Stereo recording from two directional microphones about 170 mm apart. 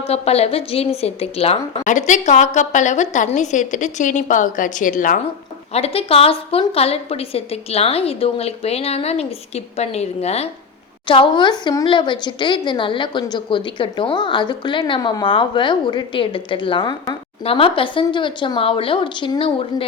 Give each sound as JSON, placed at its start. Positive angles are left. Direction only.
{"t": 0.0, "sound": "a woman's voice", "side_deg": 35}
{"t": 5.7, "sound": "a woman's voice", "side_deg": 35}